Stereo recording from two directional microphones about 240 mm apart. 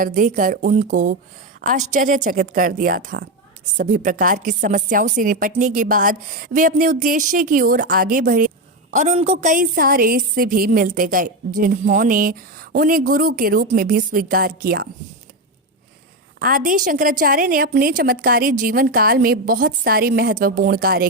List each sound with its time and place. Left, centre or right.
0.0 s a woman's voice: right
16.4 s a woman's voice: right